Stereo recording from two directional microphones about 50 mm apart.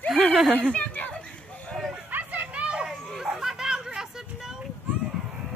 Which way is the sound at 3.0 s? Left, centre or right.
Centre.